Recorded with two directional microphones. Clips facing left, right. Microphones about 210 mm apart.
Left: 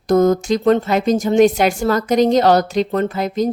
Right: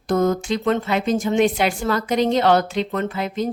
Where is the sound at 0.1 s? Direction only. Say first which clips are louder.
Left 5 dB; 40° left (ahead or behind).